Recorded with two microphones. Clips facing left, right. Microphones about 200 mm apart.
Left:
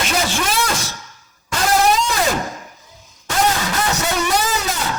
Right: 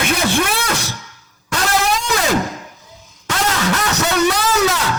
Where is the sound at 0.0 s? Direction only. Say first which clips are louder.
Right 3 dB; 60° right (ahead or behind).